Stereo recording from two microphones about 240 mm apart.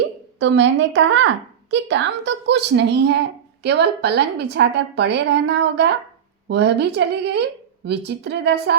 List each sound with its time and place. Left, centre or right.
0.3 s a woman's voice: right